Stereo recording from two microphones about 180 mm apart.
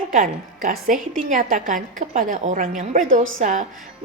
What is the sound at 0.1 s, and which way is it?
A woman's voice, 50° right (ahead or behind).